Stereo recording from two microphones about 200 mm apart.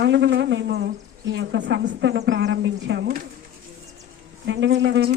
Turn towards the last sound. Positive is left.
turn(degrees=-65)  # may be behind; listen again after turning